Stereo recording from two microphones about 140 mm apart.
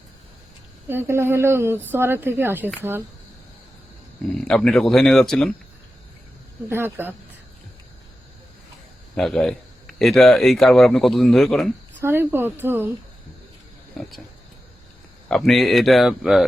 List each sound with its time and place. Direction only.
0.9 s speech: 15° right (ahead or behind)
4.4 s speech: 5° left (ahead or behind)
6.7 s speech: 15° right (ahead or behind)
9.1 s speech: 5° left (ahead or behind)
11.9 s speech: 15° right (ahead or behind)
14.0 s speech: centre (ahead or behind)
15.3 s speech: centre (ahead or behind)